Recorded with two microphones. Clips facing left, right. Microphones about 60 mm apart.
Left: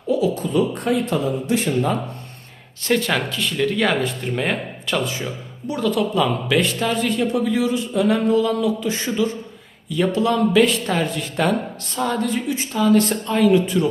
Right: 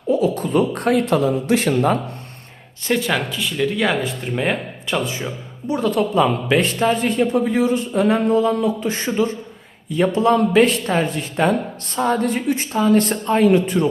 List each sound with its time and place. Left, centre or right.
0.2 s speech: right
2.9 s speech: centre
4.9 s speech: right
12.7 s speech: right